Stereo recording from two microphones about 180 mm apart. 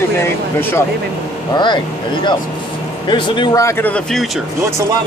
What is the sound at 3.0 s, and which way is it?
A man's voice, 25° left (ahead or behind).